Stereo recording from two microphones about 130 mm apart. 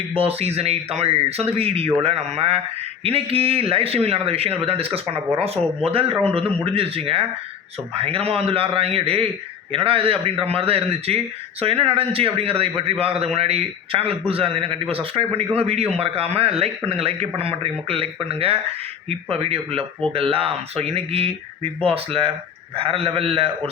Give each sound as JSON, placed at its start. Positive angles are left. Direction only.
{"t": 0.1, "sound": "a man's voice", "side_deg": -50}